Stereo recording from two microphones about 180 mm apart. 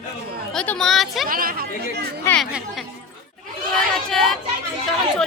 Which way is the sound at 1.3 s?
55° right (ahead or behind).